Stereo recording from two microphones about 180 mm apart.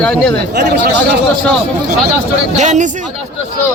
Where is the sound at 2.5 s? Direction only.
40° right (ahead or behind).